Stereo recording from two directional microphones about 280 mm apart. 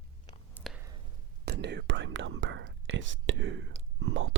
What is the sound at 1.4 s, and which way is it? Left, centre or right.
Whispering, right.